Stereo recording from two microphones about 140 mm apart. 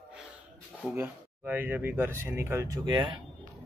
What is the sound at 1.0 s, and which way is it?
Speech, 15° right (ahead or behind).